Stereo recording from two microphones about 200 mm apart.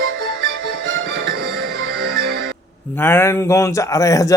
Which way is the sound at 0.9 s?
55° right (ahead or behind).